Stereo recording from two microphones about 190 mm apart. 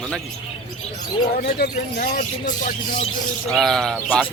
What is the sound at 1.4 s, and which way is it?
Speech, 50° left (ahead or behind).